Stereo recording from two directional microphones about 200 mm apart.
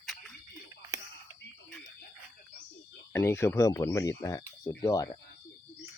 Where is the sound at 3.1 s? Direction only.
15° left (ahead or behind).